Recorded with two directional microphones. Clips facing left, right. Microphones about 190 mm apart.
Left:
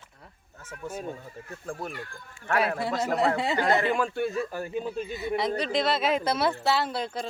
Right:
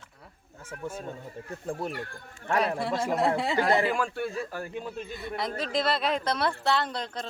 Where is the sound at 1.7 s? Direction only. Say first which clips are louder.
Right 3 dB; 25° right (ahead or behind).